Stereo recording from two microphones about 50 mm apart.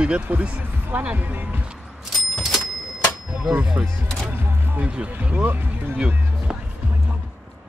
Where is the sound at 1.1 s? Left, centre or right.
Right.